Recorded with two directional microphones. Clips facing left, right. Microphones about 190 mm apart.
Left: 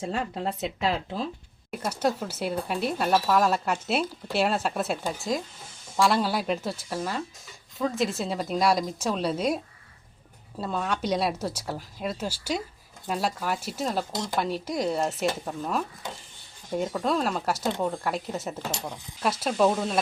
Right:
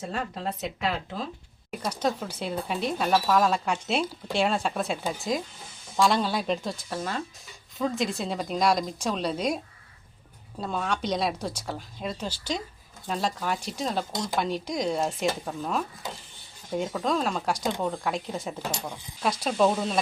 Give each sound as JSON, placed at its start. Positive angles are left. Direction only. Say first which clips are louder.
{"t": 0.1, "sound": "speech", "louder": "left 1 dB", "side_deg": 30}
{"t": 1.8, "sound": "speech", "louder": "left 1 dB", "side_deg": 10}
{"t": 6.0, "sound": "speech", "louder": "even", "side_deg": 5}
{"t": 10.6, "sound": "speech", "louder": "left 1 dB", "side_deg": 5}